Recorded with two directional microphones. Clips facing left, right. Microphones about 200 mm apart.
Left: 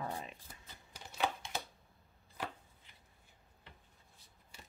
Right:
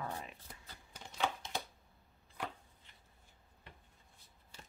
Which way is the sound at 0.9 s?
10° left (ahead or behind).